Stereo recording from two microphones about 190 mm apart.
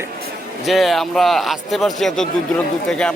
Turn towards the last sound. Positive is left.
turn(degrees=5)  # may be behind; listen again after turning